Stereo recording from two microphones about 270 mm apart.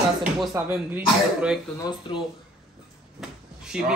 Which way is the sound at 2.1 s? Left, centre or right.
Centre.